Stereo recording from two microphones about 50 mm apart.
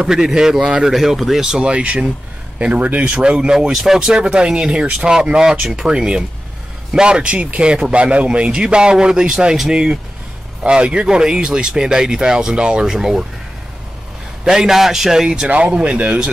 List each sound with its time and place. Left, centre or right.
0.0 s a man's voice: centre
3.7 s a man's voice: centre
14.4 s speech: centre